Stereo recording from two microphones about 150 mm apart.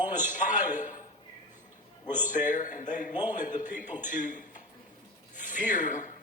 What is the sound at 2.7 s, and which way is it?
A man's voice, 55° left (ahead or behind).